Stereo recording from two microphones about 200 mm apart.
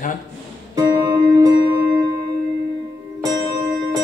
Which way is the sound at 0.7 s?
20° right (ahead or behind).